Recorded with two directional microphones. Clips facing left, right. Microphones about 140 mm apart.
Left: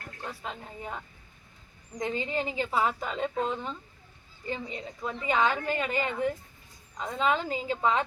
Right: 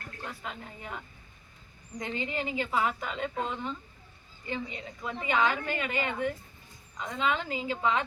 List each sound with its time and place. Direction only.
0.3 s a woman's voice: 30° left (ahead or behind)
2.0 s a woman's voice: 30° left (ahead or behind)